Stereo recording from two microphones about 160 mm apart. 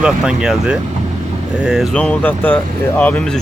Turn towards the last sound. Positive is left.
turn(degrees=10)  # may be behind; listen again after turning